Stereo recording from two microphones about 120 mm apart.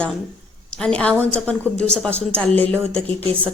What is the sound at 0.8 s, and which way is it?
A woman's voice, 10° left (ahead or behind).